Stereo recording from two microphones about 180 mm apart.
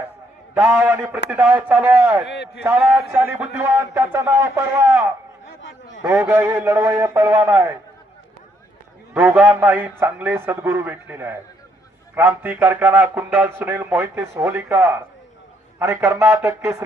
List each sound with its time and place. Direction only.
0.5 s a man's voice: 10° right (ahead or behind)
2.2 s a man's voice: 70° left (ahead or behind)
2.6 s a man's voice: 10° right (ahead or behind)
9.1 s a man's voice: 10° right (ahead or behind)